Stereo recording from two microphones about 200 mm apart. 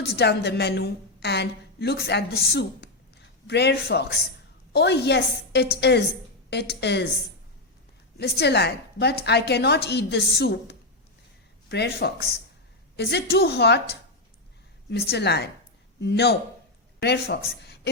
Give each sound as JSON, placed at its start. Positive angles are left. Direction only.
{"t": 0.0, "sound": "a woman's voice", "side_deg": 55}
{"t": 8.2, "sound": "a woman's voice", "side_deg": 55}
{"t": 17.6, "sound": "a sound", "side_deg": 55}